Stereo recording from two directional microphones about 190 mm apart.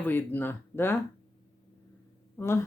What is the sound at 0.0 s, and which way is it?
Speech, 10° left (ahead or behind).